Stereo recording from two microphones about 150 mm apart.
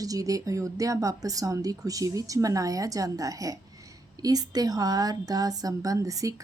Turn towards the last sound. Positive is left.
turn(degrees=-20)  # may be behind; listen again after turning